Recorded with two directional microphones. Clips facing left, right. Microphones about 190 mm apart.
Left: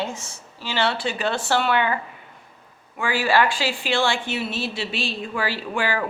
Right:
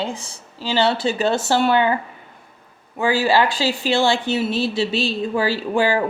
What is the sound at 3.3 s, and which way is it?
A woman's voice, 35° right (ahead or behind).